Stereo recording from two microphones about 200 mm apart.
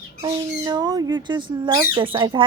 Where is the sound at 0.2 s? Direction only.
20° right (ahead or behind).